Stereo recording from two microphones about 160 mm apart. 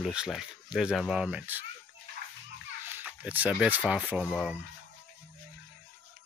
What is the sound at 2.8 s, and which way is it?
Speech, 10° right (ahead or behind).